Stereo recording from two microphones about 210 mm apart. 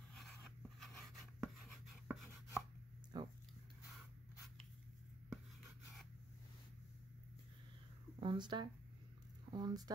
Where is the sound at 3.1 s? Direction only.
20° right (ahead or behind).